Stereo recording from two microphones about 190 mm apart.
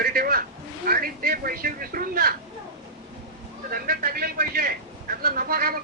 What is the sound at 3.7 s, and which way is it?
Speech, 50° right (ahead or behind).